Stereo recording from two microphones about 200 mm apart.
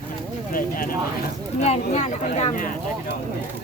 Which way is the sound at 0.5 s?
45° left (ahead or behind).